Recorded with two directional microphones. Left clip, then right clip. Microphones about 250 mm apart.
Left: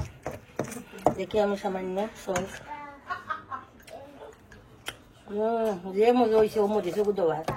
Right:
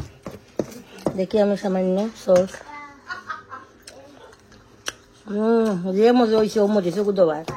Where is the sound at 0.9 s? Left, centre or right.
Right.